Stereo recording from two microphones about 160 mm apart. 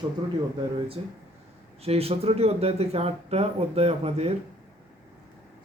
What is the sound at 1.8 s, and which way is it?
Speech, 40° right (ahead or behind).